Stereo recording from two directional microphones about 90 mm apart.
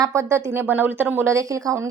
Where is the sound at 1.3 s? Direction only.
35° right (ahead or behind).